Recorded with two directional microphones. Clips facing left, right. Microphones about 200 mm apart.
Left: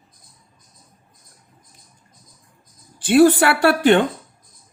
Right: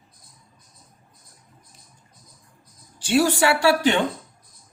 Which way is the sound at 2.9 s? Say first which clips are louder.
Left 7 dB; 55° left (ahead or behind).